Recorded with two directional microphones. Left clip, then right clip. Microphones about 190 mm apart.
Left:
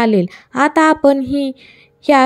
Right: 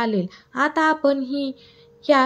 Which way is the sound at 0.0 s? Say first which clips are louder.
Left 9 dB; 40° left (ahead or behind).